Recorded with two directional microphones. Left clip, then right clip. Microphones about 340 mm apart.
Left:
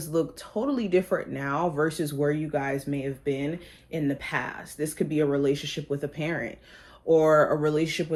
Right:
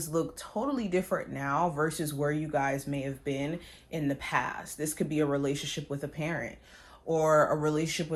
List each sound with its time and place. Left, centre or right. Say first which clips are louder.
0.0 s speech: left 4 dB; right
0.6 s speech: left 6 dB; centre